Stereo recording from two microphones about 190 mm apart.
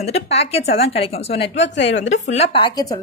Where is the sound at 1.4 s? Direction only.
65° left (ahead or behind).